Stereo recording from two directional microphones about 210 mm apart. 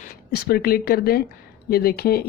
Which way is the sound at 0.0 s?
45° left (ahead or behind).